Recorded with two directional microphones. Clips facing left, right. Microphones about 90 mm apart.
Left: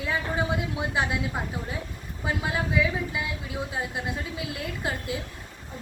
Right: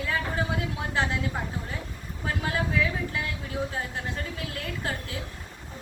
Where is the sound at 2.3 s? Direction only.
15° left (ahead or behind).